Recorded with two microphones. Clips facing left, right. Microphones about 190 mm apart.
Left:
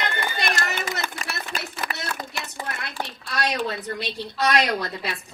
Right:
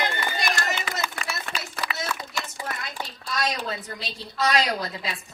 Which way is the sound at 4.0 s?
65° left (ahead or behind).